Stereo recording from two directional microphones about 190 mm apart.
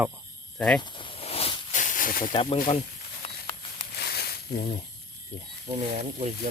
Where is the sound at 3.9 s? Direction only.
60° left (ahead or behind).